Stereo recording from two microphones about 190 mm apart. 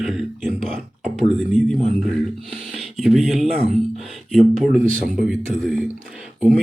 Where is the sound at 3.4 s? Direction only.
30° right (ahead or behind).